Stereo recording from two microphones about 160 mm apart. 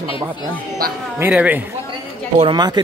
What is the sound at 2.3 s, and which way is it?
Speech, 30° right (ahead or behind).